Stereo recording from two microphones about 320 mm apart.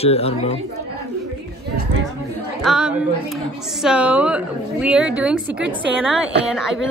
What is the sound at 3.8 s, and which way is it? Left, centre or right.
A woman's voice, centre.